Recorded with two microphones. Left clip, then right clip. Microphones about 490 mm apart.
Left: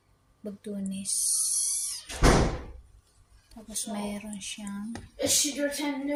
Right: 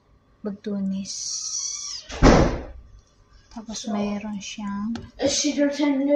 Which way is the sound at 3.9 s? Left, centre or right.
Left.